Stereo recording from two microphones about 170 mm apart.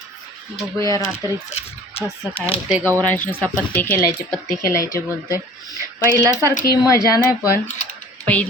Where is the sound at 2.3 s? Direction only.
35° left (ahead or behind).